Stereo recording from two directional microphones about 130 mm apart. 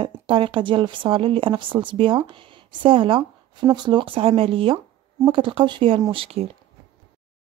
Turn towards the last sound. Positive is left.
turn(degrees=-45)  # may be behind; listen again after turning